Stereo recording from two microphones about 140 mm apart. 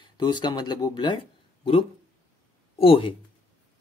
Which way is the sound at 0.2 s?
30° left (ahead or behind).